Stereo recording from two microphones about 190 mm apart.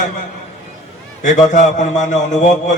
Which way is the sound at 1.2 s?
40° left (ahead or behind).